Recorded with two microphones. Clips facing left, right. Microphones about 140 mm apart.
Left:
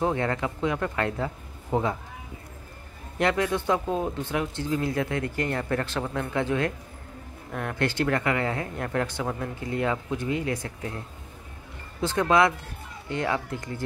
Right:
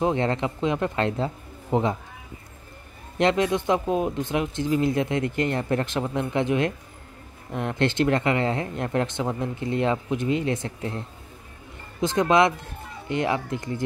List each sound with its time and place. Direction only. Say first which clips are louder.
0.0 s speech: right 3 dB; 20° right (ahead or behind)
3.2 s speech: right 3 dB; 20° right (ahead or behind)